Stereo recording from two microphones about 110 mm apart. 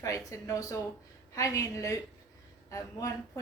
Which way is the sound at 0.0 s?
30° left (ahead or behind).